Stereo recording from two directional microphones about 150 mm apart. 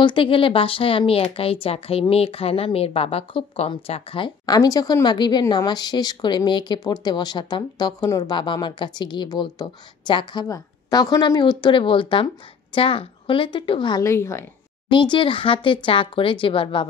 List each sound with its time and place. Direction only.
0.0 s a woman's voice: 35° left (ahead or behind)
14.0 s a woman's voice: 20° left (ahead or behind)
14.9 s speech: 35° left (ahead or behind)